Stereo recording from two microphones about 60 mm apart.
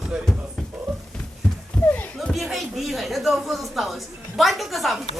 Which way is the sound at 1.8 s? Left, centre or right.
Left.